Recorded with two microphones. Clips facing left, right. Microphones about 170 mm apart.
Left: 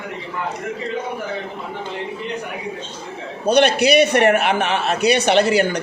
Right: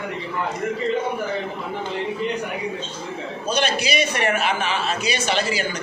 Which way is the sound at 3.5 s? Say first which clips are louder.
Left 9 dB; 65° left (ahead or behind).